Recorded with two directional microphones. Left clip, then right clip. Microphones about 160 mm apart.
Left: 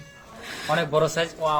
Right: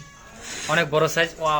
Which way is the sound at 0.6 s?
5° right (ahead or behind).